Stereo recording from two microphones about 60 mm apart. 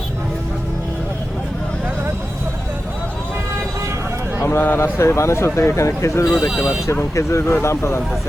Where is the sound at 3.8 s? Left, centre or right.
Right.